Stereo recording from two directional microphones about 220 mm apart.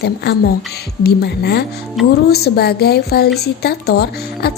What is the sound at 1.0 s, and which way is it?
Speech, 50° left (ahead or behind).